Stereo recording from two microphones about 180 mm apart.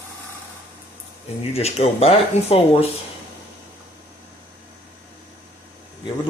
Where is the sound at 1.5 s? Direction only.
35° left (ahead or behind).